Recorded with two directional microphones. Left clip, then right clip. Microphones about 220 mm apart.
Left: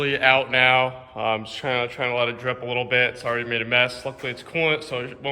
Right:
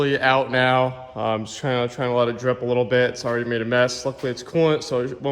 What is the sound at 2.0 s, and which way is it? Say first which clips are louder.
A man's voice: right 3 dB; 35° left (ahead or behind).